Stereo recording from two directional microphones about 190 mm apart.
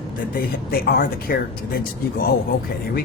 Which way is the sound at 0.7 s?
50° left (ahead or behind).